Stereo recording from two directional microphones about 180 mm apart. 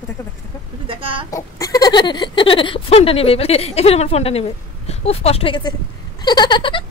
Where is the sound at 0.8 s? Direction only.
30° right (ahead or behind).